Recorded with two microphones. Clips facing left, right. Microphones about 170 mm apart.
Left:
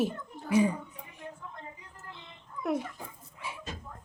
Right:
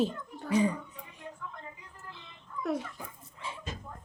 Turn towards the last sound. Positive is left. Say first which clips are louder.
# even
turn(degrees=10)  # may be behind; listen again after turning